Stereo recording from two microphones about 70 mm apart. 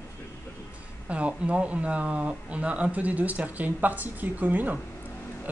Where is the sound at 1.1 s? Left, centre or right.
Centre.